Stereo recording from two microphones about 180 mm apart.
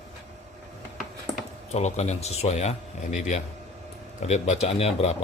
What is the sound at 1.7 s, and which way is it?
Speech, 35° left (ahead or behind).